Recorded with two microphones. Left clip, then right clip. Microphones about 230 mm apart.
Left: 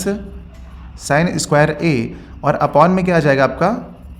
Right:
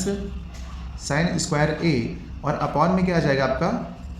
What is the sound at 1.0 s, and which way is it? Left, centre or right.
A man's voice, left.